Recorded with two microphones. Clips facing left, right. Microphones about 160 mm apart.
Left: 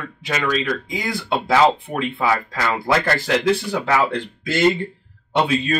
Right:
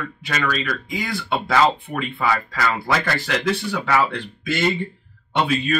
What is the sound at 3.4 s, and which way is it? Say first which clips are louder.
Speech: left 3 dB; 25° left (ahead or behind).